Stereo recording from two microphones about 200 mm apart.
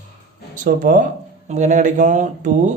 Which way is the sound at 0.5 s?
40° right (ahead or behind).